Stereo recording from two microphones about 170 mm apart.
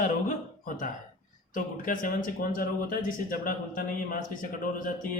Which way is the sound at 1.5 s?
50° left (ahead or behind).